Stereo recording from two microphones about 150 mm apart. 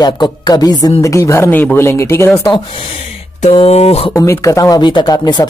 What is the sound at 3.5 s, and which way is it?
Speech, 45° left (ahead or behind).